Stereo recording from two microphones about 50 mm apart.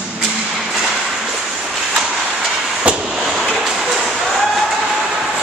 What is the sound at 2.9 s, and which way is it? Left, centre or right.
Vehicle, right.